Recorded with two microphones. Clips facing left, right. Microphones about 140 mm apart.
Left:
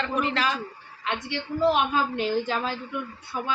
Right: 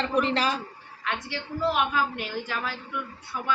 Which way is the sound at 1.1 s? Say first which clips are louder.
Left 2 dB; 20° left (ahead or behind).